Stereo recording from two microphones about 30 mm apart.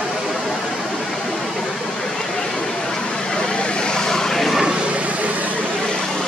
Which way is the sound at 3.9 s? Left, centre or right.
Left.